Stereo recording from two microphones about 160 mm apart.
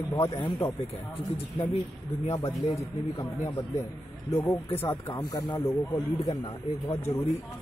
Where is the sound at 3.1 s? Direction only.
20° left (ahead or behind).